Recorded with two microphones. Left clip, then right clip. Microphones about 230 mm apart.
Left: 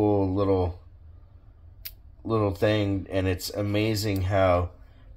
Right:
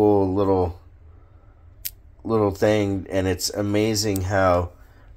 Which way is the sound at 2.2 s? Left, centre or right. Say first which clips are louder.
Right 5 dB; right.